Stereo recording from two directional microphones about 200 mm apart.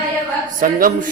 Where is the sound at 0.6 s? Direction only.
45° right (ahead or behind).